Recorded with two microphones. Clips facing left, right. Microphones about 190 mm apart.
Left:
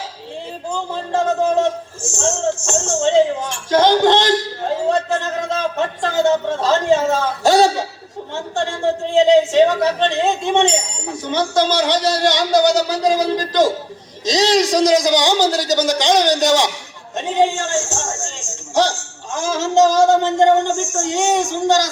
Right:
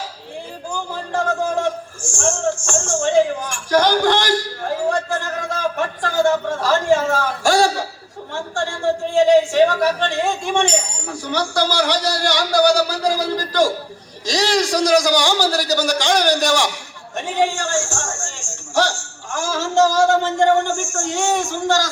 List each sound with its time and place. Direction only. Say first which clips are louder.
0.7 s a man's voice: left 3 dB; 20° left (ahead or behind)